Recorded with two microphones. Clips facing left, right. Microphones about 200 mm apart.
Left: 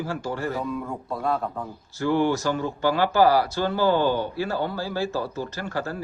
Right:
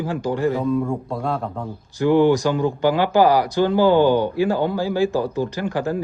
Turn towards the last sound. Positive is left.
turn(degrees=-15)  # may be behind; listen again after turning